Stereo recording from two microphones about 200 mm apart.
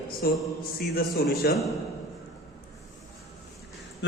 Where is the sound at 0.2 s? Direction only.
50° left (ahead or behind).